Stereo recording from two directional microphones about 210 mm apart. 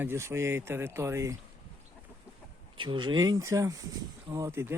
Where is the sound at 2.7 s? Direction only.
25° right (ahead or behind).